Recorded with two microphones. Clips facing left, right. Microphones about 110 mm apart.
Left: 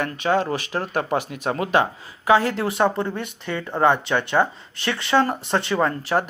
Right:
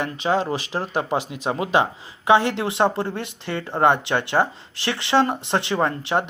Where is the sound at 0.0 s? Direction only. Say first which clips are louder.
Left 1 dB; 30° right (ahead or behind).